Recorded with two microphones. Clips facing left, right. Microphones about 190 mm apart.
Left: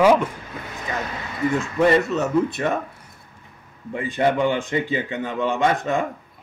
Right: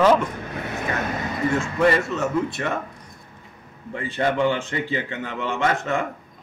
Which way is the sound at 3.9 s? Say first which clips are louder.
Left 2 dB; 15° left (ahead or behind).